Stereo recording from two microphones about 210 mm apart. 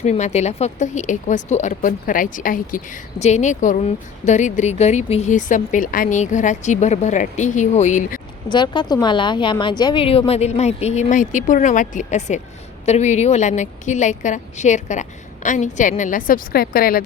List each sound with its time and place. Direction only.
0.0 s speech: 35° left (ahead or behind)
8.5 s a woman's voice: 20° left (ahead or behind); by 17.0 s 45° left (ahead or behind)